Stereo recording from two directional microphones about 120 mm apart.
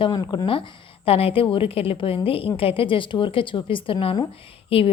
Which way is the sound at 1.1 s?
55° left (ahead or behind).